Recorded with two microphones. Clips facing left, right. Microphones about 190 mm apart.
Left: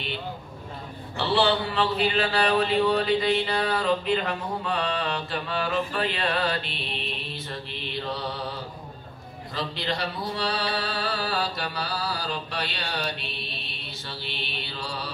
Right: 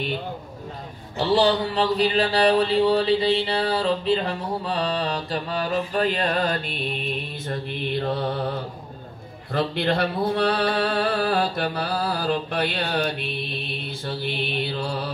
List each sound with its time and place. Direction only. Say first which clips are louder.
1.1 s mantra: right 4 dB; 40° right (ahead or behind); by 15.0 s 55° right (ahead or behind)